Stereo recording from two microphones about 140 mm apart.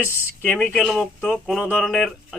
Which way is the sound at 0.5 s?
5° left (ahead or behind).